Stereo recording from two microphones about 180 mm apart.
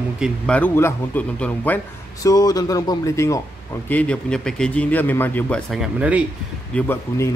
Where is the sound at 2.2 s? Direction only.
20° left (ahead or behind).